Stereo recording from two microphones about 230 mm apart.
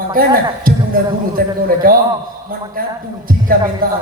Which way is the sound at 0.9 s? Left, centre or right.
Right.